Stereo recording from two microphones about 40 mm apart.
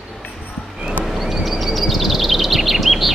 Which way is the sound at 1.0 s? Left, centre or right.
Centre.